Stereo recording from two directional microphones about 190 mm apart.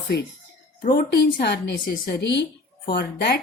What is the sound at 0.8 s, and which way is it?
A woman's voice, 55° left (ahead or behind).